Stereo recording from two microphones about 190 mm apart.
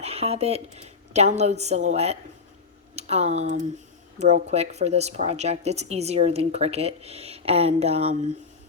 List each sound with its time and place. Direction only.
0.0 s speech: 30° right (ahead or behind)